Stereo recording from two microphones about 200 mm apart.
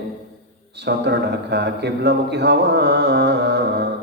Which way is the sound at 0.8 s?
55° right (ahead or behind).